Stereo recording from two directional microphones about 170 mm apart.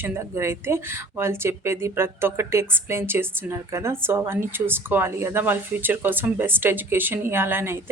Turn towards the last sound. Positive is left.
turn(degrees=-15)  # may be behind; listen again after turning